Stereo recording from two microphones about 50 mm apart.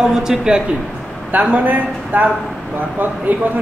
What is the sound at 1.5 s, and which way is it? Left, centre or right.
Speech, right.